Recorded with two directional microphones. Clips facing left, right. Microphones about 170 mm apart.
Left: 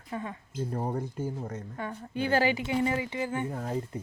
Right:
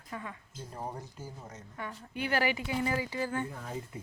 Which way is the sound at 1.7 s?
30° left (ahead or behind).